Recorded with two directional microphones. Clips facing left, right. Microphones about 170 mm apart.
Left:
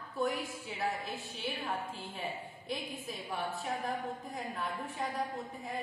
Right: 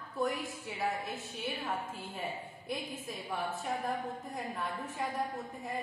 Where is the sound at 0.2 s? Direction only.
Centre (ahead or behind).